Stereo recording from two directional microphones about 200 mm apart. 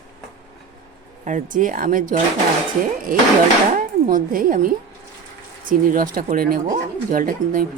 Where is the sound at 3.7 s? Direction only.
45° right (ahead or behind).